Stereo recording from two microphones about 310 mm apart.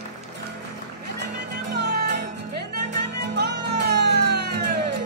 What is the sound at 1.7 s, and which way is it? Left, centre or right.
Music, right.